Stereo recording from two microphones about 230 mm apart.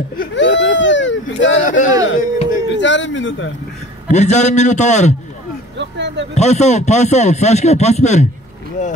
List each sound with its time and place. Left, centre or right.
0.2 s baby cry: left
1.6 s a man's voice: left
2.1 s a sound: left
2.7 s speech: left
4.1 s a man's voice: left
5.8 s vehicle: right
6.3 s a man's voice: left